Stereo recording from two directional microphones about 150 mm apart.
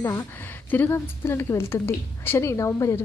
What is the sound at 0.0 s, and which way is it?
A woman's voice, 20° left (ahead or behind).